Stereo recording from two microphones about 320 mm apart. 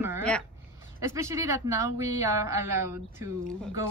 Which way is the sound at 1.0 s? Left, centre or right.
Centre.